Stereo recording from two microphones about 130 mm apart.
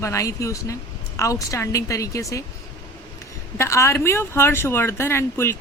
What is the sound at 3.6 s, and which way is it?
Speech, 20° left (ahead or behind).